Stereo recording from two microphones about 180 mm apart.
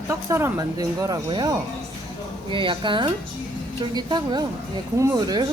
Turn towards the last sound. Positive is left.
turn(degrees=-20)  # may be behind; listen again after turning